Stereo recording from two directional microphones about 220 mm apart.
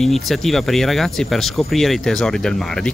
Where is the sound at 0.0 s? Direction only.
Centre (ahead or behind).